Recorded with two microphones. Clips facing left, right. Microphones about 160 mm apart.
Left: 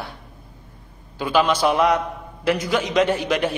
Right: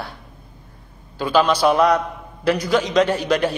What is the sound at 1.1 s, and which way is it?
A man's voice, 15° left (ahead or behind).